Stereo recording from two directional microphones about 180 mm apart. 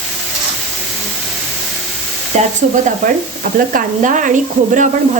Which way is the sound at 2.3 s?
40° right (ahead or behind).